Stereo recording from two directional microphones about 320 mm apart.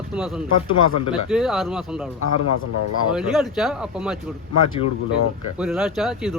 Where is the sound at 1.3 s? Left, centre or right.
Centre.